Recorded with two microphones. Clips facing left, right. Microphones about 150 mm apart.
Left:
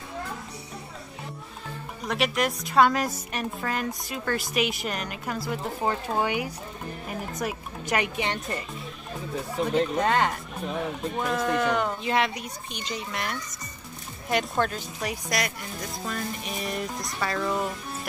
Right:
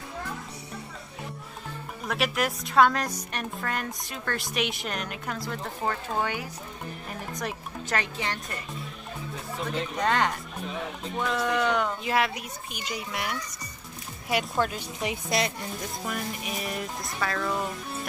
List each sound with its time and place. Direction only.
2.0 s a woman's voice: centre (ahead or behind)
8.0 s speech: 20° left (ahead or behind)
9.9 s a woman's voice: 5° left (ahead or behind)
15.0 s a woman's voice: 25° right (ahead or behind)
16.1 s a woman's voice: 10° right (ahead or behind)